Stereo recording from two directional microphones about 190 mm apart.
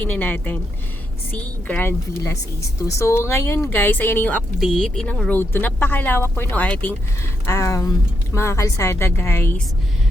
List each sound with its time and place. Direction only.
0.0 s a woman's voice: 10° left (ahead or behind)